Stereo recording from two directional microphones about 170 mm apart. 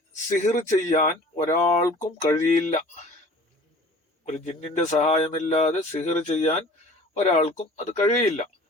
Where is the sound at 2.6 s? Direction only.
45° left (ahead or behind).